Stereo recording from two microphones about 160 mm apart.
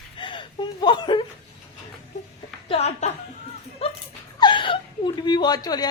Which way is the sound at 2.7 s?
40° left (ahead or behind).